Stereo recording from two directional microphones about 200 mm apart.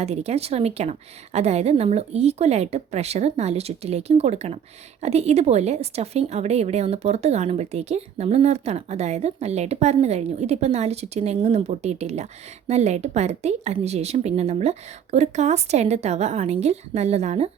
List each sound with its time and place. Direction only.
0.0 s a woman's voice: 30° right (ahead or behind)